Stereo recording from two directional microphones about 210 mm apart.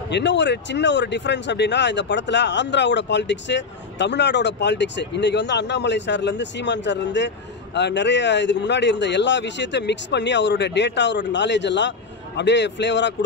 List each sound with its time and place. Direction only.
0.1 s speech: 55° left (ahead or behind)